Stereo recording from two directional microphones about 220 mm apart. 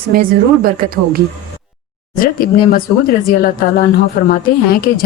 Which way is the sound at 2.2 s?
40° left (ahead or behind).